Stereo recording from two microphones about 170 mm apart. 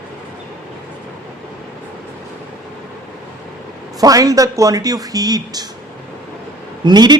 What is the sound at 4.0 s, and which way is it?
A man's voice, 20° right (ahead or behind).